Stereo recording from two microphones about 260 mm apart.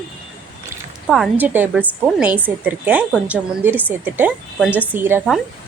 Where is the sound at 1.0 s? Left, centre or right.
Centre.